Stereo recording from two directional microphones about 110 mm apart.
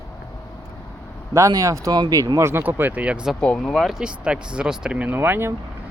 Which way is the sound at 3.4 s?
10° left (ahead or behind).